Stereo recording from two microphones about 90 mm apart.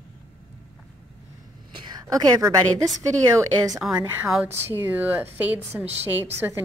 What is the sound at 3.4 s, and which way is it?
Speech, 40° right (ahead or behind).